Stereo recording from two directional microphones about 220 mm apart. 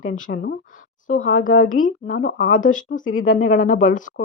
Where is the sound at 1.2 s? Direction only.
65° left (ahead or behind).